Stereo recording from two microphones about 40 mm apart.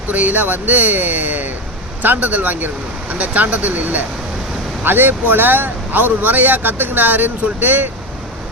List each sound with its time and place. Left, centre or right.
0.1 s speech: right
2.0 s speech: right
4.8 s speech: right